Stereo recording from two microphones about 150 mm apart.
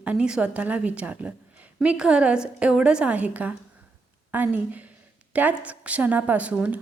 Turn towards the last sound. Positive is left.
turn(degrees=-10)  # may be behind; listen again after turning